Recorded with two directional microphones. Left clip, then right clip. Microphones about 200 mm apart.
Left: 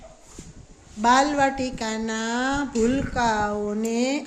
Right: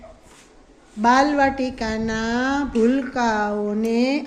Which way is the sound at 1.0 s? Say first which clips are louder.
Right 2 dB; centre (ahead or behind).